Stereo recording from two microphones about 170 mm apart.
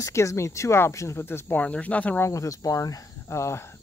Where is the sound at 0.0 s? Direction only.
15° left (ahead or behind).